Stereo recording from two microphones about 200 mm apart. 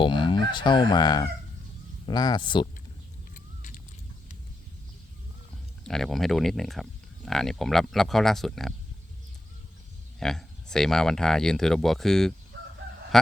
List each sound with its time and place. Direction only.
0.0 s fowl: 25° left (ahead or behind)
2.0 s speech: 20° left (ahead or behind)
3.3 s a sound: 40° left (ahead or behind)
5.8 s speech: centre (ahead or behind)
10.2 s speech: centre (ahead or behind)